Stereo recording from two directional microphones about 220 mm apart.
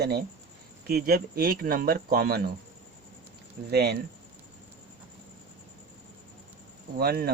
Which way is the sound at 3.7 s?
45° right (ahead or behind).